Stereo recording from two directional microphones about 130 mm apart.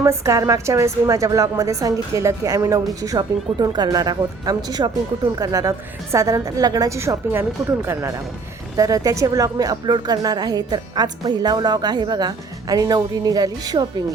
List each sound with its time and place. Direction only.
0.0 s speech: 25° right (ahead or behind)
8.7 s a woman's voice: 25° right (ahead or behind)